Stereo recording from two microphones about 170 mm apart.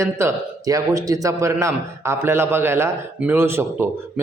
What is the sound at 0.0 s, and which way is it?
A man's voice, 15° right (ahead or behind).